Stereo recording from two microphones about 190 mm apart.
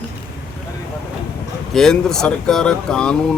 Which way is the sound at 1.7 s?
Centre (ahead or behind).